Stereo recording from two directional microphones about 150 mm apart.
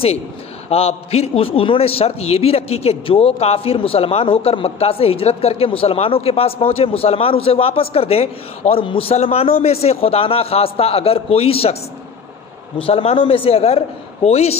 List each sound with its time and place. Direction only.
0.7 s a man's voice: 40° left (ahead or behind)
12.7 s a man's voice: 40° left (ahead or behind)